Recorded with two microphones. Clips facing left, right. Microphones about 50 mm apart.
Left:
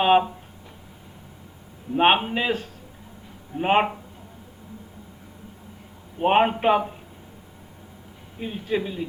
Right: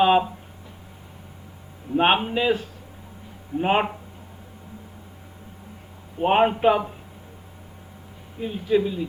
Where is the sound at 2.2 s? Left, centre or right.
Left.